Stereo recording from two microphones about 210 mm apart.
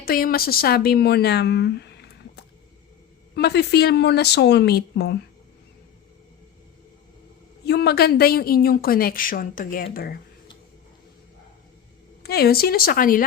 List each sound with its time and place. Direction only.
0.0 s a woman's voice: 45° left (ahead or behind)
7.6 s a woman's voice: 50° left (ahead or behind)
12.2 s a woman's voice: 50° left (ahead or behind)